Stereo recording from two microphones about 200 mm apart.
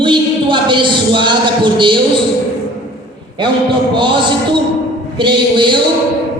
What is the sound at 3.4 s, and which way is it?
A man's voice, 25° right (ahead or behind).